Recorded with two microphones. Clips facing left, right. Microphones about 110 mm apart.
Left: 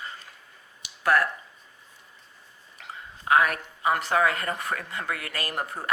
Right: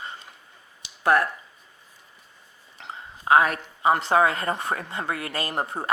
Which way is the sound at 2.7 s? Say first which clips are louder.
Right 3 dB; 25° right (ahead or behind).